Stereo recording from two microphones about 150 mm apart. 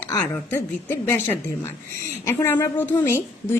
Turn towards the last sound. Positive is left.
turn(degrees=15)  # may be behind; listen again after turning